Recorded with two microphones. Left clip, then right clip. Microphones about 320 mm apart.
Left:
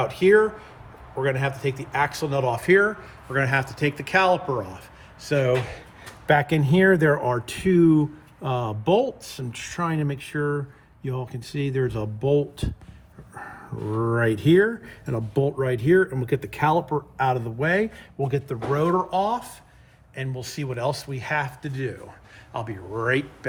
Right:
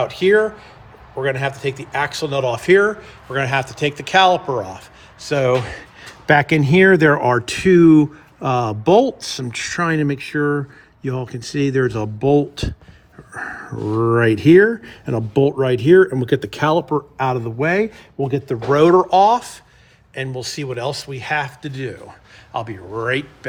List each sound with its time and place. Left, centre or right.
0.0 s speech: centre
6.0 s speech: right
7.4 s speech: centre
8.6 s speech: right
9.0 s speech: centre
12.2 s speech: right
13.3 s speech: centre
16.9 s speech: right
18.3 s speech: right; by 23.5 s centre